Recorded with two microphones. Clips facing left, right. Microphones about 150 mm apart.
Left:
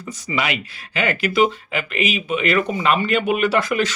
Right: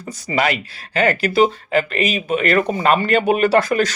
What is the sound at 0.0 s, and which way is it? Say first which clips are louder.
Speech: right 4 dB; 35° right (ahead or behind).